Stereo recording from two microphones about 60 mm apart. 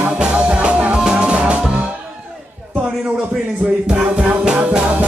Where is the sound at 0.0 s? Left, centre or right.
Centre.